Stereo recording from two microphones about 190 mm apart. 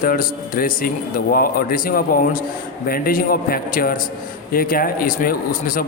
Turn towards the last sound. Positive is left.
turn(degrees=45)  # may be behind; listen again after turning